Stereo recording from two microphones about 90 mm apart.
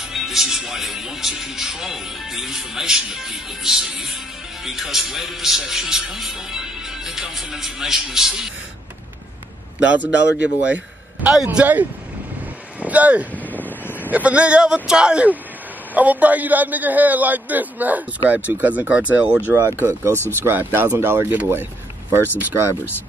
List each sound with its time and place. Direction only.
0.0 s speech: 5° right (ahead or behind)
9.8 s speech: 15° right (ahead or behind)
12.8 s speech: 15° right (ahead or behind)
13.4 s a sound: 20° left (ahead or behind)
14.1 s a man's voice: 15° right (ahead or behind)
19.5 s a man's voice: 30° right (ahead or behind)